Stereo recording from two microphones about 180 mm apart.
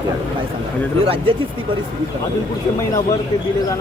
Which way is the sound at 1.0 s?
30° right (ahead or behind).